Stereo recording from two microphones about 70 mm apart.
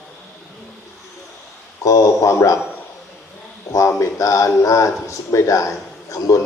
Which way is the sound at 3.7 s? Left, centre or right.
Left.